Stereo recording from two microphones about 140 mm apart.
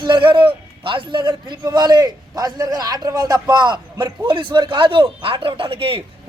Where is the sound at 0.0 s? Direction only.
35° right (ahead or behind).